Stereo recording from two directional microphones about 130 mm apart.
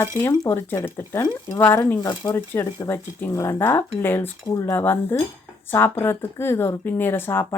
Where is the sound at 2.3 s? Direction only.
15° left (ahead or behind).